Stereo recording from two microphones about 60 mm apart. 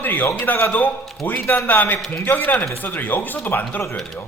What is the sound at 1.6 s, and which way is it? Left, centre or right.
A man's voice, left.